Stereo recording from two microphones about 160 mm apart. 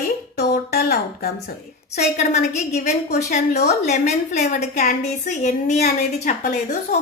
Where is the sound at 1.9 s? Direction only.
45° left (ahead or behind).